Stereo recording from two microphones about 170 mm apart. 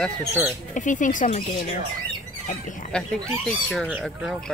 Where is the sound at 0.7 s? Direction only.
50° left (ahead or behind).